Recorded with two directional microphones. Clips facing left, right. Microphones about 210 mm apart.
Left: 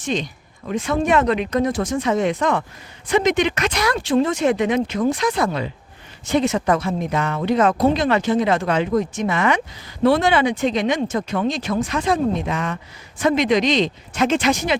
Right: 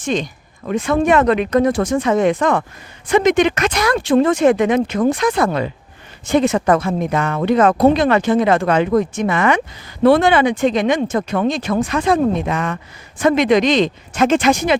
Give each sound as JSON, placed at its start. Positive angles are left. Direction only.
{"t": 0.0, "sound": "speech", "side_deg": -50}